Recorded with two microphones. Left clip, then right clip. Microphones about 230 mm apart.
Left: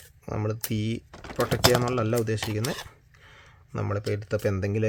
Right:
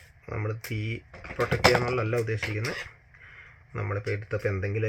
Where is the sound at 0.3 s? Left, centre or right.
Left.